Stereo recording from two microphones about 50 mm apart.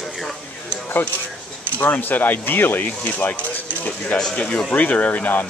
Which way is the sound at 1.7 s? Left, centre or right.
Left.